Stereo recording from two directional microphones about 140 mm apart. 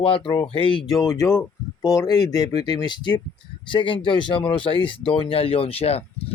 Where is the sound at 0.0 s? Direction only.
35° left (ahead or behind).